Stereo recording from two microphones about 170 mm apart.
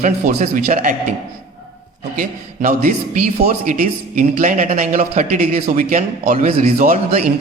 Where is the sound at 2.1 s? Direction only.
55° right (ahead or behind).